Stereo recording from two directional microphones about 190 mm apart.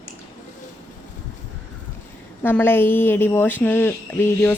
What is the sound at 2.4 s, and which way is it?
Speech, 10° left (ahead or behind).